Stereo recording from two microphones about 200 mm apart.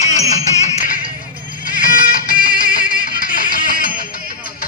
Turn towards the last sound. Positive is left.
turn(degrees=45)  # may be behind; listen again after turning